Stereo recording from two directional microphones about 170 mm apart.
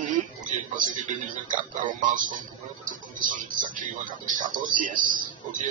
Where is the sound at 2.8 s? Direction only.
50° right (ahead or behind).